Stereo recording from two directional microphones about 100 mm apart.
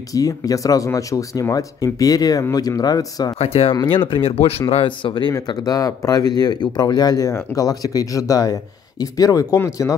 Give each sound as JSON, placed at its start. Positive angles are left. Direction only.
{"t": 0.1, "sound": "speech", "side_deg": 35}
{"t": 3.3, "sound": "speech", "side_deg": 90}
{"t": 4.1, "sound": "speech", "side_deg": 70}
{"t": 4.8, "sound": "speech", "side_deg": 50}
{"t": 5.5, "sound": "speech", "side_deg": 40}